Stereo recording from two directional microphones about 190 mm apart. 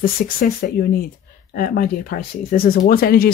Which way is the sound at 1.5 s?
50° left (ahead or behind).